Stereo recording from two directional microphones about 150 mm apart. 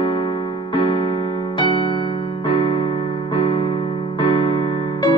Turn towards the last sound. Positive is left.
turn(degrees=35)  # may be behind; listen again after turning